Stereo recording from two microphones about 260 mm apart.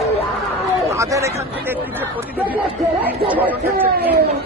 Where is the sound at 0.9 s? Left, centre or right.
Centre.